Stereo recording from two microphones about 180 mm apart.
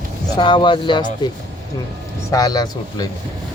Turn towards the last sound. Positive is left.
turn(degrees=20)  # may be behind; listen again after turning